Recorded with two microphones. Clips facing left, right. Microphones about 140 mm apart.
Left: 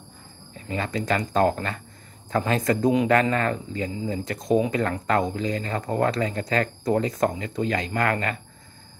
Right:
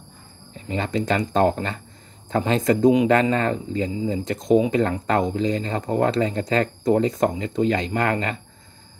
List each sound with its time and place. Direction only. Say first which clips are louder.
0.7 s speech: right 3 dB; 25° right (ahead or behind)